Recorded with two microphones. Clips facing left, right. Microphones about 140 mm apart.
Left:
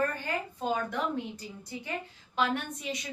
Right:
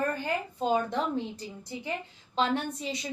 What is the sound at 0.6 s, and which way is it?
Speech, 25° right (ahead or behind).